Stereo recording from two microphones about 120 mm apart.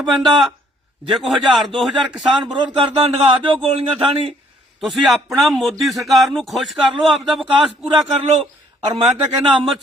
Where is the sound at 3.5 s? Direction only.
50° right (ahead or behind).